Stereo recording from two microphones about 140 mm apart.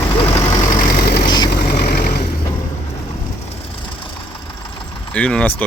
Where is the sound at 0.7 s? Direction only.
80° left.